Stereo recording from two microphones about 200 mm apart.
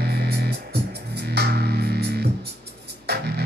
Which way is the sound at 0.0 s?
55° right (ahead or behind).